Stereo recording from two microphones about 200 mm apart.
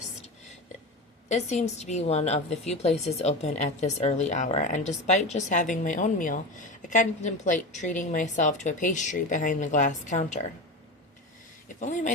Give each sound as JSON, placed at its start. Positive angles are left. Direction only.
{"t": 1.3, "sound": "a woman's voice", "side_deg": 35}
{"t": 11.8, "sound": "a woman's voice", "side_deg": 35}